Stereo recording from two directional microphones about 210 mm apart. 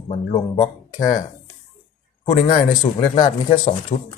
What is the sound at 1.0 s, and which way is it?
Speech, 15° left (ahead or behind).